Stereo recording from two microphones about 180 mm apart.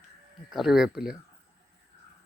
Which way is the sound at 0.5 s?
Centre (ahead or behind).